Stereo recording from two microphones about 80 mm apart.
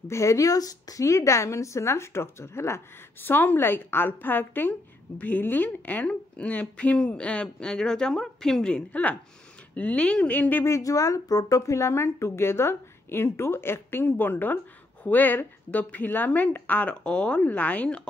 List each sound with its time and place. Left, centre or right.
0.1 s speech: left; by 10.6 s centre
10.6 s a woman's voice: left; by 18.0 s centre